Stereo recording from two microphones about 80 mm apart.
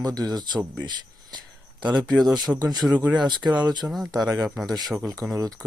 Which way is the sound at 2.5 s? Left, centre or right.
Right.